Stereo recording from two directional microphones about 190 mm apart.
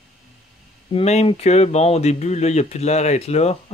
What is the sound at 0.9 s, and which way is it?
Speech, 35° left (ahead or behind).